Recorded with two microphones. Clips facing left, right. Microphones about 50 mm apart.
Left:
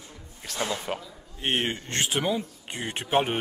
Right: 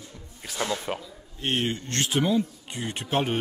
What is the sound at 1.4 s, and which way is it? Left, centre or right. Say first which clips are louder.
A man's voice: even; left.